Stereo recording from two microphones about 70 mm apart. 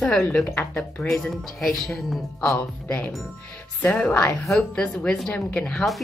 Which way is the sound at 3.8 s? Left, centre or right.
Centre.